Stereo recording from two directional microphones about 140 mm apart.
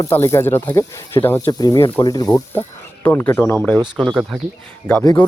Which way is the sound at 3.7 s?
30° right (ahead or behind).